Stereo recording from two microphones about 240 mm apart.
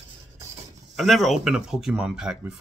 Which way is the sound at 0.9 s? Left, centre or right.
Centre.